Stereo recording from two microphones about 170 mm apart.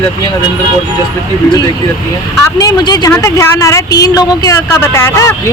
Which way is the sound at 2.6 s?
25° left (ahead or behind).